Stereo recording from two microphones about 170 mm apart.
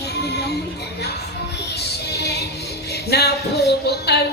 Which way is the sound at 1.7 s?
70° left (ahead or behind).